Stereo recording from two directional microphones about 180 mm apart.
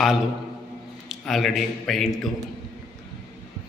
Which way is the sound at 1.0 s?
Centre (ahead or behind).